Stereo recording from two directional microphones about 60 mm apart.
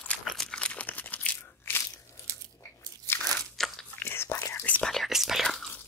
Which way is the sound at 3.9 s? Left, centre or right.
Left.